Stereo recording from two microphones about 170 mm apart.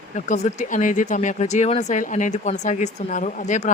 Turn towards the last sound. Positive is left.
turn(degrees=45)  # may be behind; listen again after turning